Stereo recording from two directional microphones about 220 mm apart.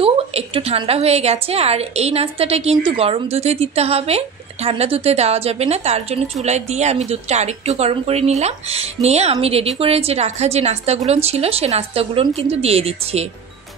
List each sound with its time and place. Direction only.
0.0 s a woman's voice: 25° right (ahead or behind)